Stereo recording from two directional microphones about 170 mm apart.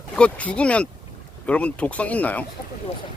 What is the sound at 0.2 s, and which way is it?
Speech, 5° left (ahead or behind).